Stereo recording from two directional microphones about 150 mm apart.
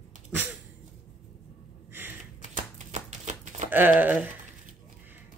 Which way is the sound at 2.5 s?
50° right (ahead or behind).